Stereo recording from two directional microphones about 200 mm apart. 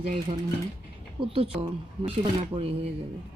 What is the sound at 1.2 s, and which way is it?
Speech, 25° right (ahead or behind).